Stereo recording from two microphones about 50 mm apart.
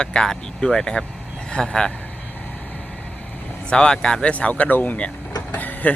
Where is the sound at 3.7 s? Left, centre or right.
Centre.